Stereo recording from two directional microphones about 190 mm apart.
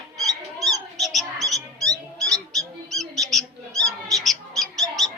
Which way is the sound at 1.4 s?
20° right (ahead or behind).